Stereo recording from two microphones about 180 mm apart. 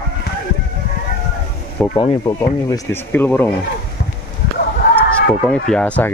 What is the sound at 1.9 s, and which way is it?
Speech, 25° left (ahead or behind).